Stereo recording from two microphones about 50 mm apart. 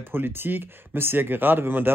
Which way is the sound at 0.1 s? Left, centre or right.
Right.